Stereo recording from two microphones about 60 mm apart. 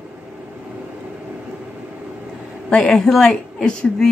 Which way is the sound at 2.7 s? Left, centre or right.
Centre.